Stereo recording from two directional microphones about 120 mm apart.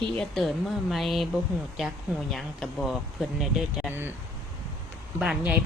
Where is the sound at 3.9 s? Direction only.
15° right (ahead or behind).